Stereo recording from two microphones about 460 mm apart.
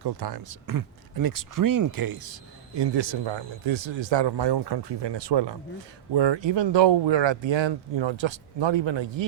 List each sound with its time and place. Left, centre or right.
0.0 s speech: right